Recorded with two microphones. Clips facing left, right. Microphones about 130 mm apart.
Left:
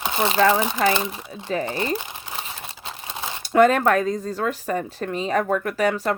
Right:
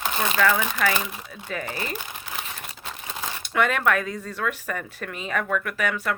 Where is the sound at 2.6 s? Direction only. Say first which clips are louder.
Left 2 dB; 30° left (ahead or behind).